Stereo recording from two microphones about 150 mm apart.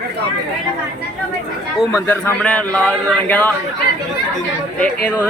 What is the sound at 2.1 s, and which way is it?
A man's voice, 10° left (ahead or behind).